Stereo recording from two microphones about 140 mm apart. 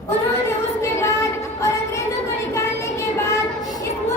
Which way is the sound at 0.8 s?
20° left (ahead or behind).